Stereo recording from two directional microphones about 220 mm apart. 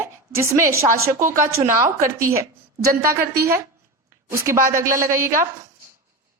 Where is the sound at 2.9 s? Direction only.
45° right (ahead or behind).